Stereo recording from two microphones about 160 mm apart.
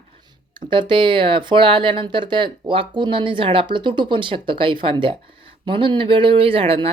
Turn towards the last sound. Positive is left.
turn(degrees=-35)  # may be behind; listen again after turning